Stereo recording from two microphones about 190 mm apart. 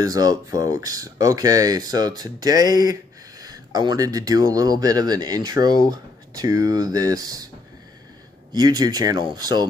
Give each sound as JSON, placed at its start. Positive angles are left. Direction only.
{"t": 0.0, "sound": "speech", "side_deg": -20}
{"t": 8.5, "sound": "speech", "side_deg": -20}